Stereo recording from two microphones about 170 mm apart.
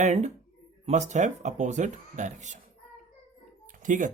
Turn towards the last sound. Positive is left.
turn(degrees=-50)  # may be behind; listen again after turning